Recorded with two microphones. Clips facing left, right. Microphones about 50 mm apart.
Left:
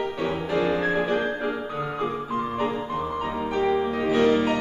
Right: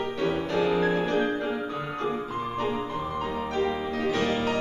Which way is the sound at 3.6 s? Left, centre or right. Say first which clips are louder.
Left 5 dB; centre.